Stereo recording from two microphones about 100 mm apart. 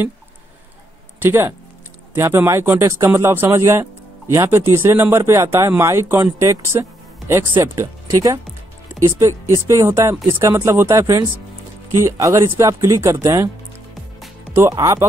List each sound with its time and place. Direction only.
1.2 s speech: 25° right (ahead or behind)
14.5 s speech: 30° right (ahead or behind)